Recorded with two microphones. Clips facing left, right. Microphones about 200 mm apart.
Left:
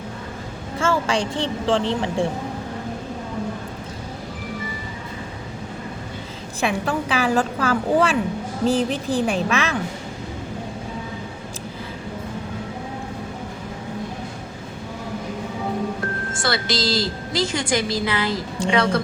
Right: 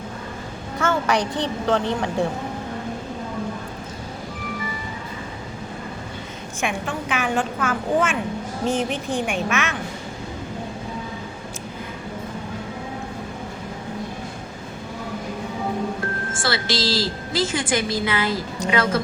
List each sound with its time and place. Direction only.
0.8 s speech: 30° left (ahead or behind)
6.6 s a woman's voice: 35° left (ahead or behind)
16.4 s a woman's voice: centre (ahead or behind)